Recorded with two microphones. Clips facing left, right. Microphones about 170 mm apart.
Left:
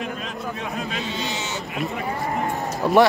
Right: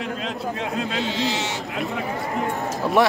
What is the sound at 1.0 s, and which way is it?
Speech, 75° right (ahead or behind).